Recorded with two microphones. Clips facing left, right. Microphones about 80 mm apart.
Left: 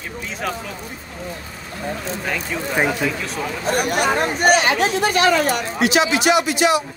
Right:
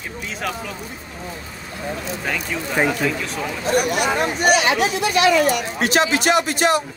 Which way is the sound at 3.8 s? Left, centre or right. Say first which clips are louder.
Even; left.